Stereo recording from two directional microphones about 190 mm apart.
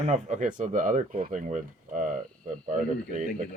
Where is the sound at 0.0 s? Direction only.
40° right (ahead or behind).